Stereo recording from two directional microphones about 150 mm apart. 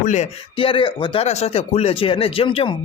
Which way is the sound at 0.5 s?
35° left (ahead or behind).